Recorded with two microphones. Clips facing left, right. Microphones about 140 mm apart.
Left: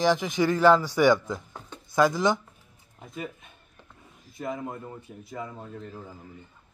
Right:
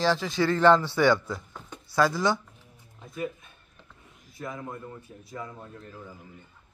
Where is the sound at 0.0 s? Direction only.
15° left (ahead or behind).